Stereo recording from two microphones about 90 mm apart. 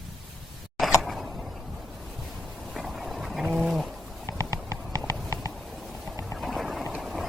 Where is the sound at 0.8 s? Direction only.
Centre (ahead or behind).